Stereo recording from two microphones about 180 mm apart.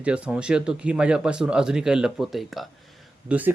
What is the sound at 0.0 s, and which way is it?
Speech, 5° right (ahead or behind).